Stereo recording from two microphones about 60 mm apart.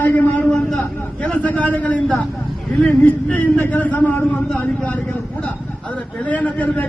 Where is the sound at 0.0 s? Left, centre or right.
Left.